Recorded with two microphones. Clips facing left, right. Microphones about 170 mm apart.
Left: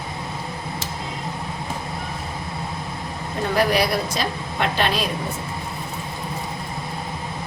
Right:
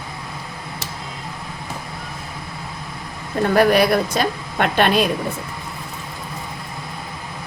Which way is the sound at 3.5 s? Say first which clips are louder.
Right 5 dB; 55° right (ahead or behind).